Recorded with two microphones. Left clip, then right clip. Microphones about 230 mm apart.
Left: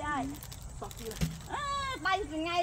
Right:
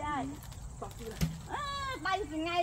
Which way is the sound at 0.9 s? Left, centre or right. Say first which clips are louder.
Left 4 dB; left.